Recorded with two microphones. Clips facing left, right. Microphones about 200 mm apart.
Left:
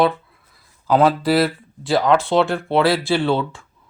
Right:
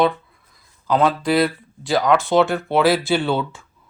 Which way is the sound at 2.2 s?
30° left (ahead or behind).